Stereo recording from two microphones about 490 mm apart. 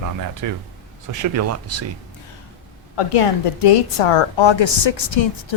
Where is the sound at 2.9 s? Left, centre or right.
Left.